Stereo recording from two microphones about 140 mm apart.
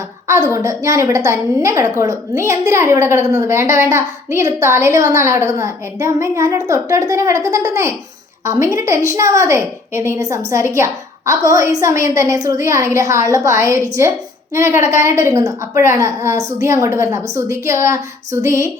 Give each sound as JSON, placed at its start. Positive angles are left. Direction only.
{"t": 0.3, "sound": "a woman's voice", "side_deg": -20}